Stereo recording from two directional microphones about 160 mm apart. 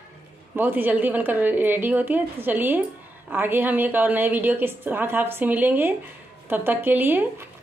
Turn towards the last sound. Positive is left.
turn(degrees=-10)  # may be behind; listen again after turning